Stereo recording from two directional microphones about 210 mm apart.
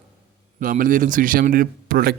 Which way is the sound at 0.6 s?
40° right (ahead or behind).